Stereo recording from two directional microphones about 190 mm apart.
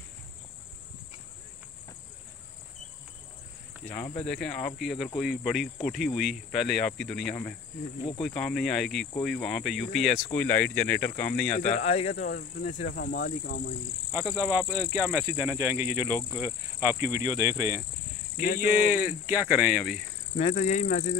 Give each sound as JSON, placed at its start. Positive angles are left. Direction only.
{"t": 4.2, "sound": "speech", "side_deg": 5}
{"t": 11.5, "sound": "speech", "side_deg": 35}
{"t": 14.6, "sound": "speech", "side_deg": -10}
{"t": 18.4, "sound": "speech", "side_deg": 45}
{"t": 18.9, "sound": "speech", "side_deg": -10}
{"t": 20.3, "sound": "speech", "side_deg": 35}